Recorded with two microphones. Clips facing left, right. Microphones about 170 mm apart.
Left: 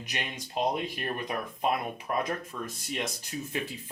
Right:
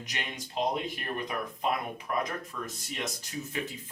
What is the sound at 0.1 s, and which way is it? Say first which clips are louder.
Speech: left 3 dB; 15° left (ahead or behind).